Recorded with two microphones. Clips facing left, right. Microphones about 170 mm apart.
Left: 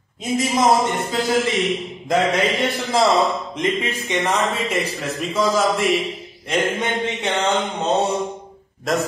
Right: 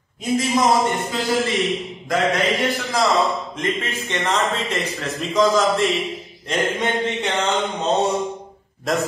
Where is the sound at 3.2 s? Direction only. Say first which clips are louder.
Left 1 dB; 15° left (ahead or behind).